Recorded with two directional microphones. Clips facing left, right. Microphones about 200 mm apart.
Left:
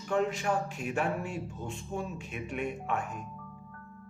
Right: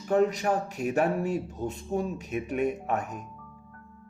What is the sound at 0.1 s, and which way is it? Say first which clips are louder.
Speech: right 5 dB; 40° right (ahead or behind).